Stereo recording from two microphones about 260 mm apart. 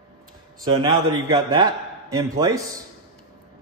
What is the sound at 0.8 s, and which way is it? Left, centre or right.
Speech, centre.